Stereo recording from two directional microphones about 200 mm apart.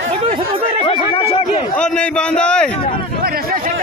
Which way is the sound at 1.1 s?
30° left (ahead or behind).